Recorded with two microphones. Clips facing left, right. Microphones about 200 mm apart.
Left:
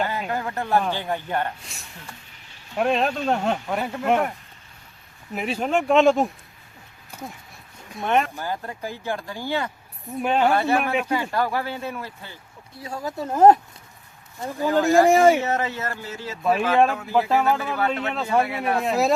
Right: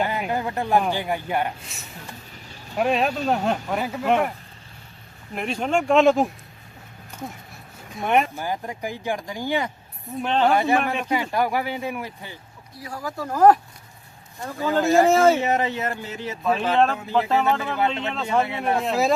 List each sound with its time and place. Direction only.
0.0 s speech: 15° right (ahead or behind)
1.6 s speech: centre (ahead or behind)
5.3 s speech: 5° left (ahead or behind)
8.0 s speech: 15° right (ahead or behind)
10.2 s speech: 10° left (ahead or behind)
10.5 s speech: 15° right (ahead or behind)
12.8 s speech: 25° left (ahead or behind)
14.7 s speech: 15° right (ahead or behind)
15.0 s speech: 15° left (ahead or behind)
15.4 s speech: 15° right (ahead or behind)
16.4 s speech: 10° left (ahead or behind)
17.7 s speech: 25° right (ahead or behind)
18.1 s speech: 5° left (ahead or behind)